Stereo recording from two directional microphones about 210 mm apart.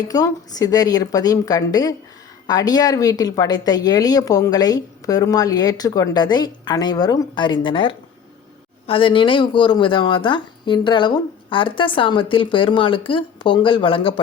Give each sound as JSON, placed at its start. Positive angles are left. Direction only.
{"t": 0.1, "sound": "speech", "side_deg": 15}